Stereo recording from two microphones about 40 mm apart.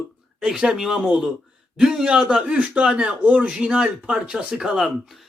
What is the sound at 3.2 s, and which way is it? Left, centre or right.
Speech, right.